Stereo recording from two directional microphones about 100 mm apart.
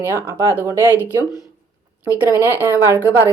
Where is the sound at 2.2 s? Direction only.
20° right (ahead or behind).